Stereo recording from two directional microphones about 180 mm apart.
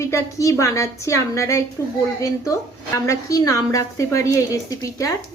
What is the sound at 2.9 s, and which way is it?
A woman's voice, 20° left (ahead or behind).